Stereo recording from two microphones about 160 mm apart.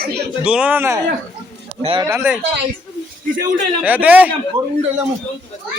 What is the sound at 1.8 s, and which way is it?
Speech, 35° right (ahead or behind).